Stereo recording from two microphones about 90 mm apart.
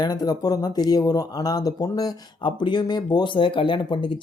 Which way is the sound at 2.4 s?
55° left (ahead or behind).